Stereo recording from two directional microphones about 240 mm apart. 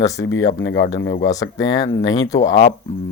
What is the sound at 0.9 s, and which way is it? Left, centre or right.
Speech, centre.